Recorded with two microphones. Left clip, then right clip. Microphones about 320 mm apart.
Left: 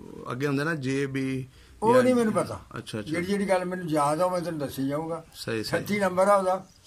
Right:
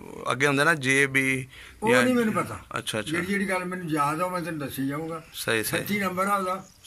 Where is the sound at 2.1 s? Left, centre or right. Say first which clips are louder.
Left 1 dB; centre.